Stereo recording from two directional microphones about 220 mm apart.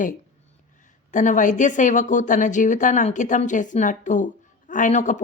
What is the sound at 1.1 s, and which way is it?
A woman's voice, 35° left (ahead or behind).